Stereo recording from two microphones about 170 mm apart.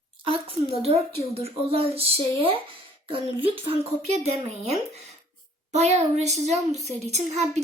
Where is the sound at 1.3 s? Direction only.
35° right (ahead or behind).